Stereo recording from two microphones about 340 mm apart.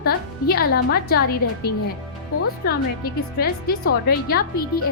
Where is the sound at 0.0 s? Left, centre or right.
Left.